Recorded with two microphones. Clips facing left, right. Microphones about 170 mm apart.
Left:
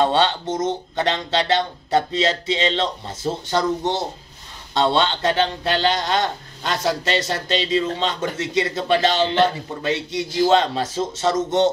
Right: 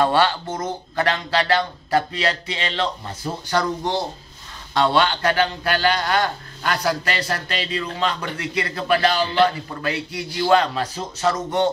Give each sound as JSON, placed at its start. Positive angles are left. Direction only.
{"t": 0.0, "sound": "speech", "side_deg": 20}